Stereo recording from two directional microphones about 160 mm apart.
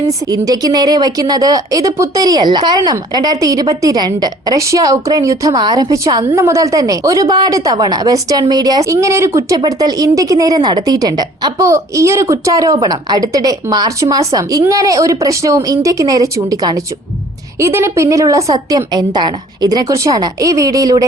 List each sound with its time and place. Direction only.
0.1 s speech: 25° right (ahead or behind)